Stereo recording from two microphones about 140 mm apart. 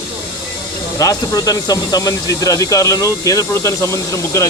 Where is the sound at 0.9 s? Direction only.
25° left (ahead or behind).